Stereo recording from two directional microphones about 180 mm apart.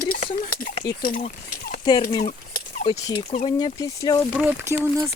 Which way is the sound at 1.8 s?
25° left (ahead or behind).